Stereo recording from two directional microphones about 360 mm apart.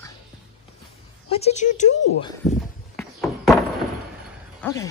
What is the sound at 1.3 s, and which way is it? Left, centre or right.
Speech, centre.